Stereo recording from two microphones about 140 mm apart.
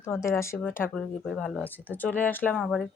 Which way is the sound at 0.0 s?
20° left (ahead or behind).